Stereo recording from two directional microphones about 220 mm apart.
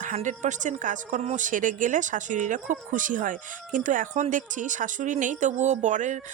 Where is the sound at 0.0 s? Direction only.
35° right (ahead or behind).